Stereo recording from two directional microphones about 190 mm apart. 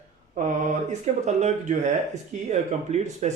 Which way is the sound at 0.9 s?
35° right (ahead or behind).